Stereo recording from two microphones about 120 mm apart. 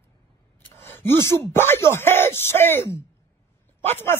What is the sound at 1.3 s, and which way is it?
Speech, 20° left (ahead or behind).